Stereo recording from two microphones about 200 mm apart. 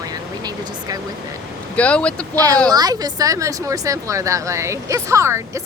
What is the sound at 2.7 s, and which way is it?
Speech, 20° right (ahead or behind).